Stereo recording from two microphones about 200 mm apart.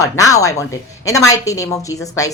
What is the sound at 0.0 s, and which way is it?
Speech, 15° left (ahead or behind).